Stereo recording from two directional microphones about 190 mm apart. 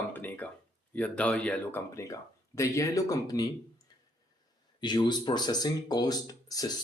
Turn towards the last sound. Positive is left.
turn(degrees=20)  # may be behind; listen again after turning